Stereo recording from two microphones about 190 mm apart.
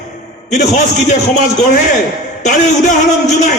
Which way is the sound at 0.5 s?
40° left (ahead or behind).